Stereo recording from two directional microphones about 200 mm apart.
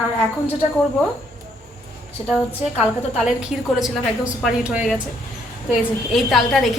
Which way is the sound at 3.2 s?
5° right (ahead or behind).